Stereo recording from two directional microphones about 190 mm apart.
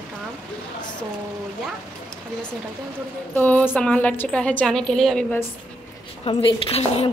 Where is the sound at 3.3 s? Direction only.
10° left (ahead or behind).